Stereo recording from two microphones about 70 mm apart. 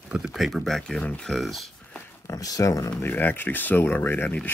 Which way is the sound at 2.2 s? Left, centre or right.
Left.